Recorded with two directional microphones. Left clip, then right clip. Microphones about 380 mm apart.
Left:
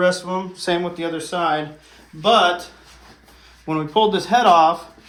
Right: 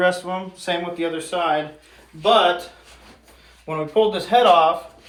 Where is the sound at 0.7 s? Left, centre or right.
Left.